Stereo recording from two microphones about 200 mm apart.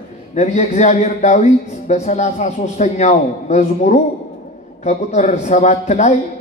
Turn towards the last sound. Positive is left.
turn(degrees=35)  # may be behind; listen again after turning